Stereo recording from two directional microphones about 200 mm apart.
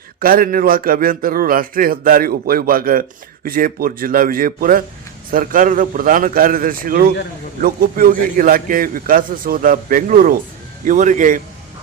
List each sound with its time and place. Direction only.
0.2 s a man's voice: 45° right (ahead or behind)